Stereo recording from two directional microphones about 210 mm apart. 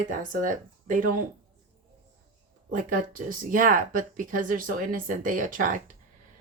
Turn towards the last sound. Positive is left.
turn(degrees=-40)  # may be behind; listen again after turning